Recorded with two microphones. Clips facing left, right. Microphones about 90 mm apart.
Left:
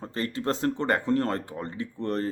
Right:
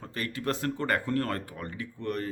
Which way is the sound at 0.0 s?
30° left (ahead or behind).